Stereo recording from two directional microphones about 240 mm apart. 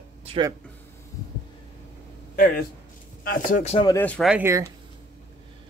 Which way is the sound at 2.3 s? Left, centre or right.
Left.